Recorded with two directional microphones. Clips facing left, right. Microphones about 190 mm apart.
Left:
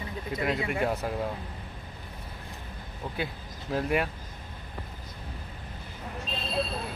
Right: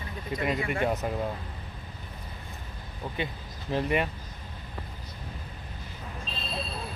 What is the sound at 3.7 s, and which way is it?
Speech, centre (ahead or behind).